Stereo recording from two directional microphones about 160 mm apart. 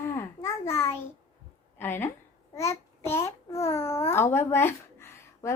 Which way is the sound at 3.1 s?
15° left (ahead or behind).